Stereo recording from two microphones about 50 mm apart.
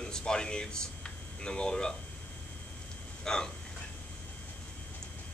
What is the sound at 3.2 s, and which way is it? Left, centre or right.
Speech, centre.